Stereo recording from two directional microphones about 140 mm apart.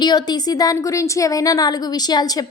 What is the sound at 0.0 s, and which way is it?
A woman's voice, 30° left (ahead or behind).